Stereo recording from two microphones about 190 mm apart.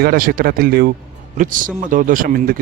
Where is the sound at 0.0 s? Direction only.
50° right (ahead or behind).